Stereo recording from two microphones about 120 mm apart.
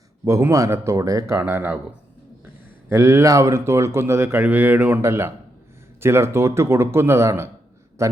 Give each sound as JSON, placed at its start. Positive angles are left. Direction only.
{"t": 0.3, "sound": "speech", "side_deg": -25}
{"t": 2.9, "sound": "speech", "side_deg": -20}